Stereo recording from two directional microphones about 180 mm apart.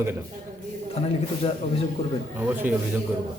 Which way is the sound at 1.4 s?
30° left (ahead or behind).